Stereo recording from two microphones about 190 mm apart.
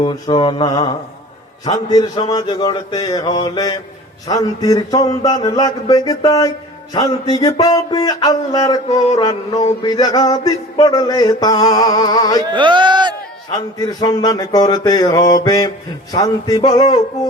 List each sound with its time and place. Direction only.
0.0 s male singing: 25° left (ahead or behind)
12.5 s speech: 25° right (ahead or behind)
13.5 s male singing: 20° left (ahead or behind)